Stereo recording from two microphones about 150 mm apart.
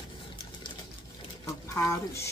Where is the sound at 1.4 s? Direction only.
20° left (ahead or behind).